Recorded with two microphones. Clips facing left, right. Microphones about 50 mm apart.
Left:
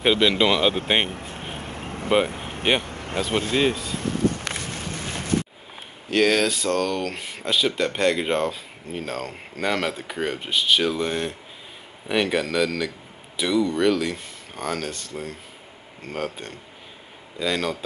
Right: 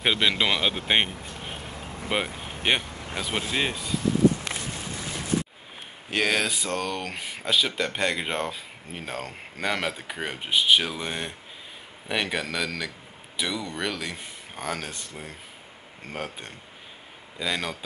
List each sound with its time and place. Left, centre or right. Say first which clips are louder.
0.0 s speech: left 5 dB; centre
1.1 s vehicle: left 3 dB; left
4.0 s a sound: right 3 dB; left
6.0 s speech: left 5 dB; centre